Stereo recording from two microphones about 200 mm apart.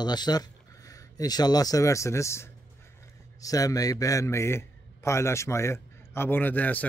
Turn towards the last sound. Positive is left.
turn(degrees=10)  # may be behind; listen again after turning